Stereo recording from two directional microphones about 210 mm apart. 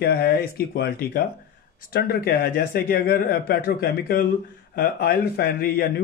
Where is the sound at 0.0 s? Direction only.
45° left (ahead or behind).